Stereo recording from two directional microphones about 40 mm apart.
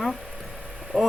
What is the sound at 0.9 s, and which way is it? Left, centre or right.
Speech, left.